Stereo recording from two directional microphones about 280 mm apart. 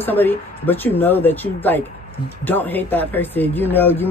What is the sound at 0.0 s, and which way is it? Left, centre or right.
Speech, centre.